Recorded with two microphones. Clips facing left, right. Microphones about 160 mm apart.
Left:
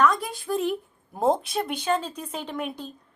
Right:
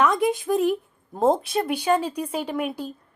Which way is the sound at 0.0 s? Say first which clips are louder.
Right 3 dB; 20° right (ahead or behind).